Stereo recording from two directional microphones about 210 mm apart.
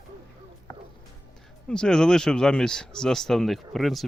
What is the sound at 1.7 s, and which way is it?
Speech, 5° left (ahead or behind).